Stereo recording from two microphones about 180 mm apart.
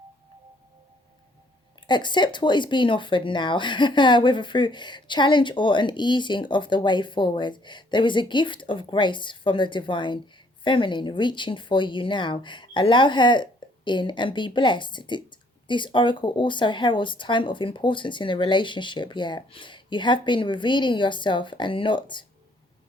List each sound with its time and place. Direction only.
1.9 s speech: 25° left (ahead or behind)